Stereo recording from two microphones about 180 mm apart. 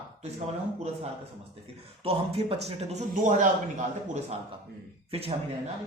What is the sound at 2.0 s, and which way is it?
Speech, 30° right (ahead or behind).